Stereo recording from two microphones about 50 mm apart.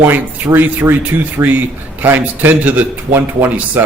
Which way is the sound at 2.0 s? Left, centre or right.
Right.